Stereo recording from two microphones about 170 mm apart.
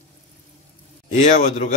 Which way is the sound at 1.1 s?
40° left (ahead or behind).